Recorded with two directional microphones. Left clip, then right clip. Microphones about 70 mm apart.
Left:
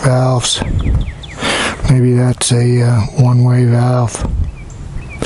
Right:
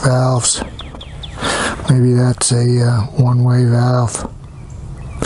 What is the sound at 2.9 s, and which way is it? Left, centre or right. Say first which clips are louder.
Speech: left 3 dB; left.